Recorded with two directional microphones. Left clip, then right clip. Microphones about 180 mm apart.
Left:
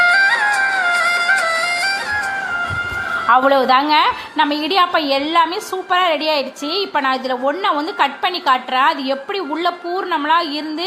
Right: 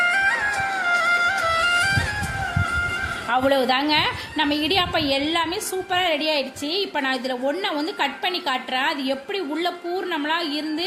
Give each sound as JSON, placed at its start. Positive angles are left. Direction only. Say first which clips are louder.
{"t": 0.0, "sound": "music", "louder": "left 7 dB", "side_deg": 20}
{"t": 1.7, "sound": "music", "louder": "left 2 dB", "side_deg": -10}
{"t": 3.2, "sound": "a woman's voice", "louder": "left 8 dB", "side_deg": -5}